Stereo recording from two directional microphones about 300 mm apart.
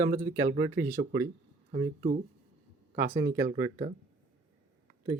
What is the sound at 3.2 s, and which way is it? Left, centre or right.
Speech, right.